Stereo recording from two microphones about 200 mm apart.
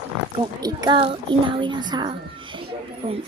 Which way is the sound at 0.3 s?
20° right (ahead or behind).